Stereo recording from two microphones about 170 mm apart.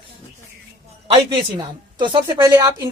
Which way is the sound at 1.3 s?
30° right (ahead or behind).